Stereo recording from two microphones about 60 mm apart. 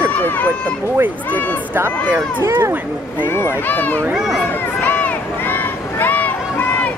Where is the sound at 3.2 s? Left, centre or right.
Left.